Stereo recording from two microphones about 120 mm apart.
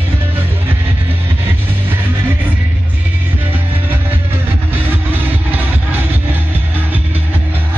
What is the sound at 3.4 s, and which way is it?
Music, 15° right (ahead or behind).